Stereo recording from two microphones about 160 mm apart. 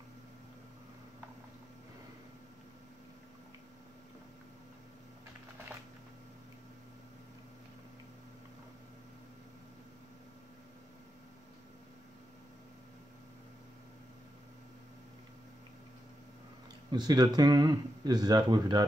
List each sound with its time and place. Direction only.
16.9 s speech: 25° right (ahead or behind)